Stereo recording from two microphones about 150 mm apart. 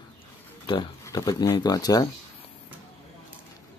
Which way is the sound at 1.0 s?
25° left (ahead or behind).